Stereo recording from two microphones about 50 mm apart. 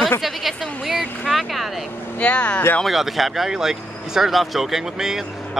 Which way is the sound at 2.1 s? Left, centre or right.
Left.